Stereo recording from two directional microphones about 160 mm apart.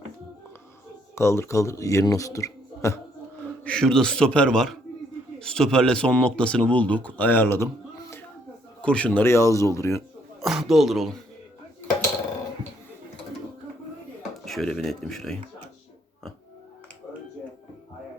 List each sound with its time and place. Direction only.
1.1 s speech: 15° left (ahead or behind)
3.6 s a man's voice: 5° left (ahead or behind)
10.4 s a man's voice: centre (ahead or behind)
14.2 s speech: centre (ahead or behind)